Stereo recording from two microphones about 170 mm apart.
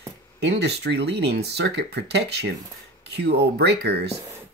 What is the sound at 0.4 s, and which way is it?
Speech, 80° right.